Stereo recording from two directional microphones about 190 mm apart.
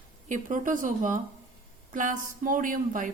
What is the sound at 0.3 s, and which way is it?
Speech, 45° right (ahead or behind).